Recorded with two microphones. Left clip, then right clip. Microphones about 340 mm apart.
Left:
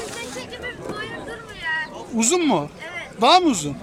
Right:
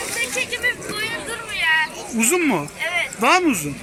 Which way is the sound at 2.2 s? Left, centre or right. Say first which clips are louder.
Even; centre.